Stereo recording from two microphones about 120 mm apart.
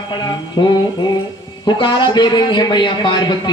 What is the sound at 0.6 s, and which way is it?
Mantra, 45° left (ahead or behind).